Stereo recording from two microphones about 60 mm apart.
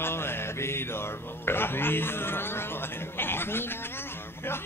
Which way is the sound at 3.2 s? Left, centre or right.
Left.